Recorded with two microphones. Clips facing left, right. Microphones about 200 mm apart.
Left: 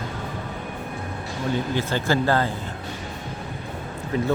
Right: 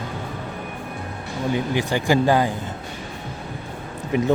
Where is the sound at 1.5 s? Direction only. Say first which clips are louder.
Right 2 dB; 15° right (ahead or behind).